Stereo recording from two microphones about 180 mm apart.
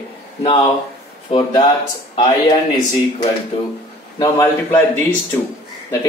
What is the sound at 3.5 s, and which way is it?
Speech, 30° left (ahead or behind).